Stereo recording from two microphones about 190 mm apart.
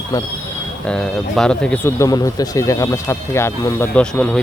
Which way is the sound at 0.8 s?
5° left (ahead or behind).